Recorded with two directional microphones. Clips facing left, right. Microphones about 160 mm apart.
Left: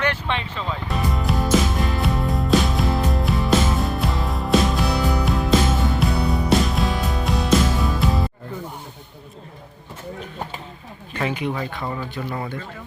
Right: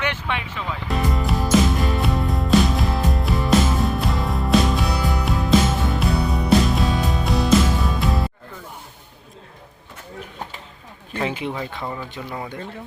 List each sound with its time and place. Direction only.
0.9 s music: centre (ahead or behind)
11.2 s speech: 25° right (ahead or behind)
11.8 s speech: centre (ahead or behind)
12.3 s speech: 10° right (ahead or behind)